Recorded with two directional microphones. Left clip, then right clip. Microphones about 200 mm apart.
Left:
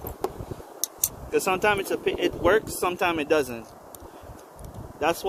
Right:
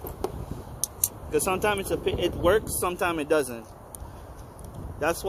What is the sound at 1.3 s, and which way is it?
Speech, centre (ahead or behind).